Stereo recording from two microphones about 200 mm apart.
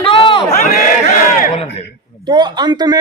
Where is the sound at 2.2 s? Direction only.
20° right (ahead or behind).